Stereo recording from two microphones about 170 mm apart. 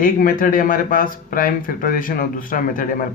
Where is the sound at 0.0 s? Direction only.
55° left (ahead or behind).